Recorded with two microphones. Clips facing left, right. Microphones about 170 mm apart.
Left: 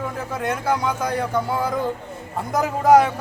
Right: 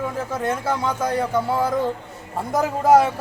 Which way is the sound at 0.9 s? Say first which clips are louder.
Right 1 dB; centre (ahead or behind).